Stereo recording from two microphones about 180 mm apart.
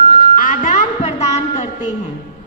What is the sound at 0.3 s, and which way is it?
Music, 50° left (ahead or behind).